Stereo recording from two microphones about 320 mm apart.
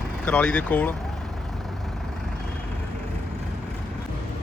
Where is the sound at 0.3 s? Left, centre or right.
Centre.